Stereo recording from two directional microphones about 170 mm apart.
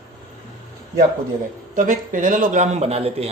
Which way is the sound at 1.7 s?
50° right (ahead or behind).